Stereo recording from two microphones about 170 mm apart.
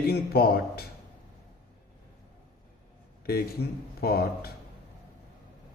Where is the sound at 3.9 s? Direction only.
65° left (ahead or behind).